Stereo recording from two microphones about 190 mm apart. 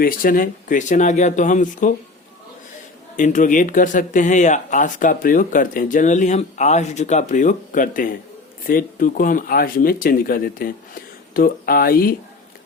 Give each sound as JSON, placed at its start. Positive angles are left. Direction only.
{"t": 0.0, "sound": "speech", "side_deg": 45}
{"t": 3.2, "sound": "speech", "side_deg": 40}